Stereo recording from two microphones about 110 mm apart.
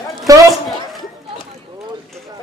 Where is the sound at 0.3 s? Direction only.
30° right (ahead or behind).